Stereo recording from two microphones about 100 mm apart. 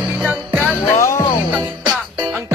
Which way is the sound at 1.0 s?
30° left (ahead or behind).